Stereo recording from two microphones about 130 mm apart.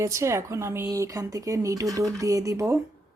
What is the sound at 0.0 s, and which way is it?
Speech, 25° right (ahead or behind).